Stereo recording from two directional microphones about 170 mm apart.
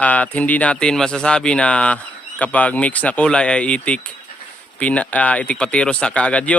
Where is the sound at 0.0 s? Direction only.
10° left (ahead or behind).